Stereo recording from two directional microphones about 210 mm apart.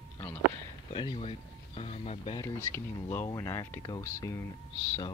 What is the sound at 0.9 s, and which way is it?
Speech, 25° left (ahead or behind).